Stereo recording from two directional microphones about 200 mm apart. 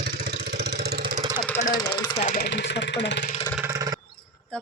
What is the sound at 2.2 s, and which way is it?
Speech, 40° left (ahead or behind).